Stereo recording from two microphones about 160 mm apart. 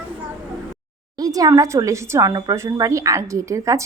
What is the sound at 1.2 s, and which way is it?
A woman's voice, 25° right (ahead or behind).